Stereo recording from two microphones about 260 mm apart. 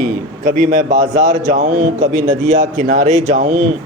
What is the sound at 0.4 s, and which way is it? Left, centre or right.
A man's voice, right.